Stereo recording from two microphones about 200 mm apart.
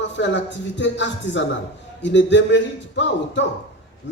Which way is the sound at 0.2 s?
65° left (ahead or behind).